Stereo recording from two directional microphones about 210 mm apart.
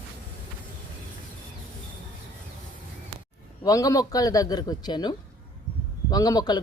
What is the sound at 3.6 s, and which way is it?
A man's voice, 15° left (ahead or behind).